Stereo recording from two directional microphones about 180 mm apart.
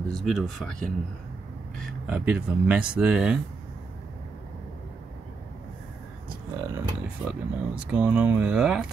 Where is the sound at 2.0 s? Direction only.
5° right (ahead or behind).